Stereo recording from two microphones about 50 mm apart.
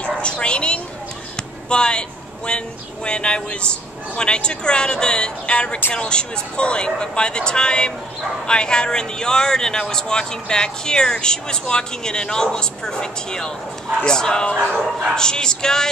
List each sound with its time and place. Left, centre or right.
0.0 s bow-wow: left
1.3 s speech: centre